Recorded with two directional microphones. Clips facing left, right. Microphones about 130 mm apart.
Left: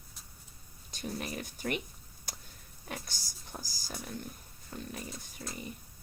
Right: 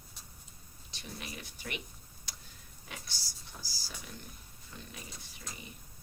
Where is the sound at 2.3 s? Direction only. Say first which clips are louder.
Left 5 dB; 50° left (ahead or behind).